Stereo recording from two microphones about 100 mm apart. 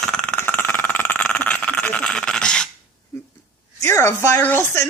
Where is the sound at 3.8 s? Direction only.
30° left (ahead or behind).